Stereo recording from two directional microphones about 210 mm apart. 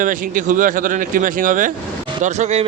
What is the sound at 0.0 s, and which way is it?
Speech, 40° right (ahead or behind).